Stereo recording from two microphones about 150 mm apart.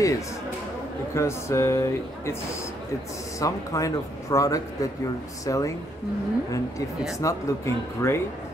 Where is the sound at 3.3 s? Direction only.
20° left (ahead or behind).